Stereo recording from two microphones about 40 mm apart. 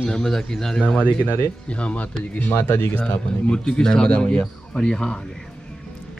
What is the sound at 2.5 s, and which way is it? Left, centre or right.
Speech, left.